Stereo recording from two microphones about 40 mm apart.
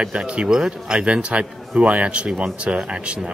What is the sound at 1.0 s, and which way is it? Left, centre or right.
Speech, right.